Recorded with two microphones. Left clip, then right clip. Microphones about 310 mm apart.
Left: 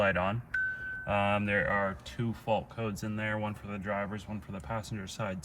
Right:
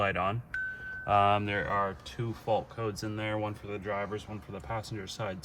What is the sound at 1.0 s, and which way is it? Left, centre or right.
Speech, right.